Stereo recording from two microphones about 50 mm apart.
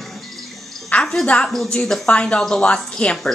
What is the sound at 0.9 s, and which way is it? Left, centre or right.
Music, left.